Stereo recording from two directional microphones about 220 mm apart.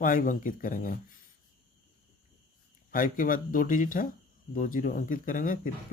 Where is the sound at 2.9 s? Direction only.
40° left (ahead or behind).